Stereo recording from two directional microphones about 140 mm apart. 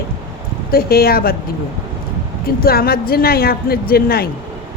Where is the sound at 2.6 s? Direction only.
90° left.